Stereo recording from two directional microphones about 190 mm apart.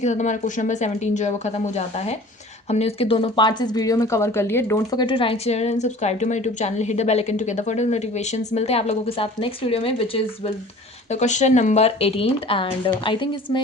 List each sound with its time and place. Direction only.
0.0 s speech: 40° left (ahead or behind)